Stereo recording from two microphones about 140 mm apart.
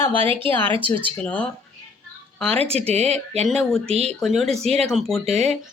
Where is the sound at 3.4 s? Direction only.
5° left (ahead or behind).